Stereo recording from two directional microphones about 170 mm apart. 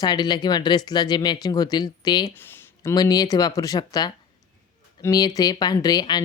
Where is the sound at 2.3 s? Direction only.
15° left (ahead or behind).